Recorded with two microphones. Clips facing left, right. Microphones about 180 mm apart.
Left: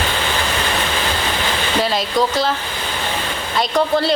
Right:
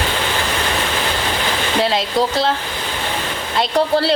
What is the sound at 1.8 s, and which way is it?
Speech, 25° right (ahead or behind).